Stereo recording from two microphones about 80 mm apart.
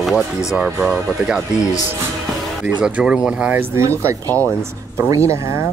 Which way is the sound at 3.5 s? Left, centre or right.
Right.